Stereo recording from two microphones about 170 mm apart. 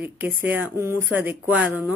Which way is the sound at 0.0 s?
10° right (ahead or behind).